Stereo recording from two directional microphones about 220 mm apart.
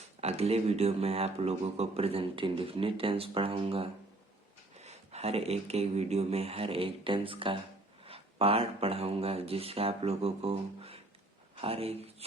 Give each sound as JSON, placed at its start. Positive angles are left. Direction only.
{"t": 0.2, "sound": "speech", "side_deg": -30}